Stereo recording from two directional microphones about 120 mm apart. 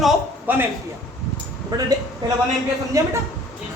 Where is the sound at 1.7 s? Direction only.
35° right (ahead or behind).